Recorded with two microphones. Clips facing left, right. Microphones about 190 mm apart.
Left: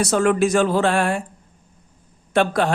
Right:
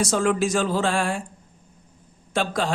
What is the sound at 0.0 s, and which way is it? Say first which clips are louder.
A man's voice: left 4 dB; 60° left (ahead or behind).